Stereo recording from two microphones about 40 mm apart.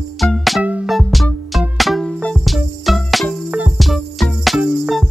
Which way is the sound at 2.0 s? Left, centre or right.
Centre.